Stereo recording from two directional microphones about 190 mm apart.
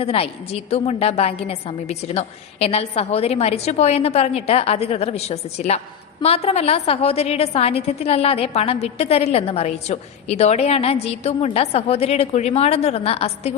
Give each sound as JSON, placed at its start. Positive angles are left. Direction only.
{"t": 0.0, "sound": "a woman's voice", "side_deg": 30}